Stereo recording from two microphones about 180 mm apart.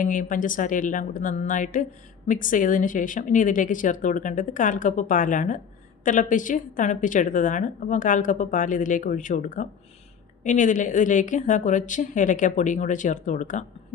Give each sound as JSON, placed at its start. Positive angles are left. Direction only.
{"t": 0.0, "sound": "a woman's voice", "side_deg": 45}